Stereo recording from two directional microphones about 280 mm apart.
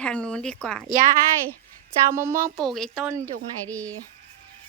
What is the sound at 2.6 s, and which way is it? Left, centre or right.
Speech, centre.